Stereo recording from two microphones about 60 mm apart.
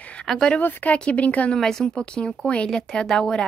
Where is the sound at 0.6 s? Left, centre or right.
Left.